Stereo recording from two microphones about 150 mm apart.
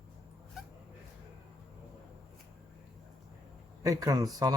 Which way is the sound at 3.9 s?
25° right (ahead or behind).